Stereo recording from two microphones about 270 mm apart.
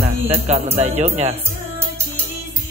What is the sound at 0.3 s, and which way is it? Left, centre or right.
Speech, right.